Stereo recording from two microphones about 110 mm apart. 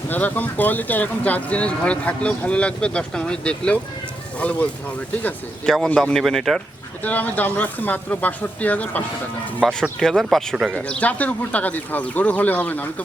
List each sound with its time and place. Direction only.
0.1 s speech: 15° left (ahead or behind)
5.7 s speech: 5° left (ahead or behind)
7.0 s speech: 15° left (ahead or behind)
9.6 s speech: 5° left (ahead or behind)
10.8 s speech: 10° left (ahead or behind)